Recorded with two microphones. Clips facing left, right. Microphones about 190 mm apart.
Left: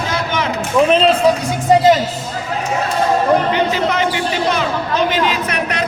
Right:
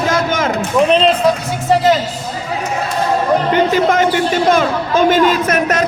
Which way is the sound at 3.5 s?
50° right (ahead or behind).